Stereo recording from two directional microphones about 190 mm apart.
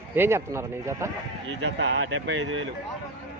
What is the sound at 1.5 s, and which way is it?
Speech, 70° right (ahead or behind).